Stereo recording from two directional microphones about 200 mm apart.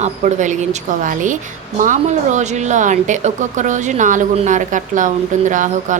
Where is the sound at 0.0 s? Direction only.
35° right (ahead or behind).